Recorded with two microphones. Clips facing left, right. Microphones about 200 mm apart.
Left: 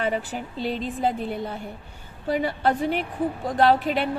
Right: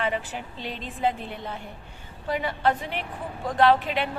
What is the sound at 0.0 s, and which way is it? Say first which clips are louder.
A woman's voice: left 2 dB; 40° left (ahead or behind).